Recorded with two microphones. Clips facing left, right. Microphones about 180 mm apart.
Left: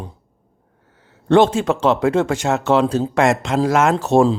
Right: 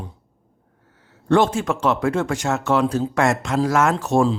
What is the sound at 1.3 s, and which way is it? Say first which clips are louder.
Speech: left 4 dB; 25° left (ahead or behind).